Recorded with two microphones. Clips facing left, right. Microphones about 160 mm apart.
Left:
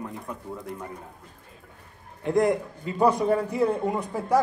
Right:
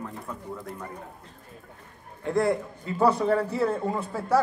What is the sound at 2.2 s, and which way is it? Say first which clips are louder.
Speech: left 2 dB; 15° left (ahead or behind).